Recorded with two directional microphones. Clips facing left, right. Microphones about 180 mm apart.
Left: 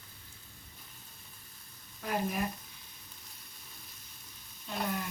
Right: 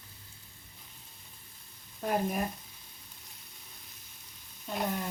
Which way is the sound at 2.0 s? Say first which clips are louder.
Right 3 dB; 45° right (ahead or behind).